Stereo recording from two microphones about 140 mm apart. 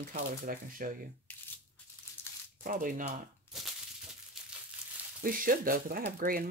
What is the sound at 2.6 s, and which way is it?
Speech, 80° right.